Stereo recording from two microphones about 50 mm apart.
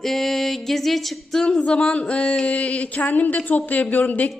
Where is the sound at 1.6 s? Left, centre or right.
Left.